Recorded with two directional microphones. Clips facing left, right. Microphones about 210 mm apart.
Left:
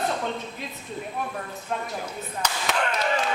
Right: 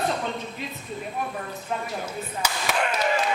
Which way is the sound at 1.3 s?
5° right (ahead or behind).